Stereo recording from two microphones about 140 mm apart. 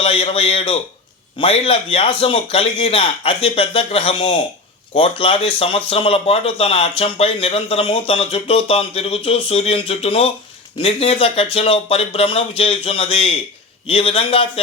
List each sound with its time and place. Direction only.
0.0 s a man's voice: 40° left (ahead or behind)